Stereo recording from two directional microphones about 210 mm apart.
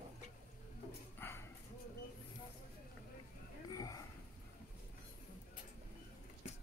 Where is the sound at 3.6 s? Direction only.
15° left (ahead or behind).